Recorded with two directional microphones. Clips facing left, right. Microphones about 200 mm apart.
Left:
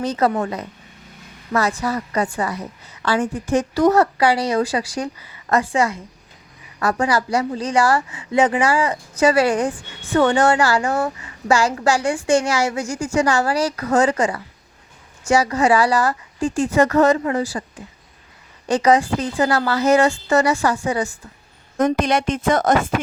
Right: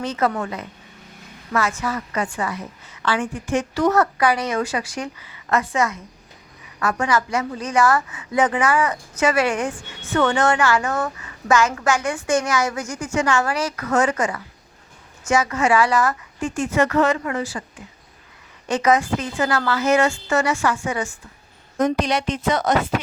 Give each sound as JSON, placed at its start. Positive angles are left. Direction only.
{"t": 0.0, "sound": "a woman's voice", "side_deg": 35}
{"t": 18.7, "sound": "a woman's voice", "side_deg": 30}
{"t": 21.8, "sound": "speech", "side_deg": 55}